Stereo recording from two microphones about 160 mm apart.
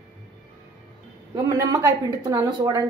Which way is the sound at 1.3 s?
25° right (ahead or behind).